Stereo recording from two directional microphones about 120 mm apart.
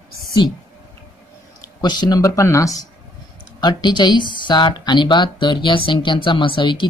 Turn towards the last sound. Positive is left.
turn(degrees=45)  # may be behind; listen again after turning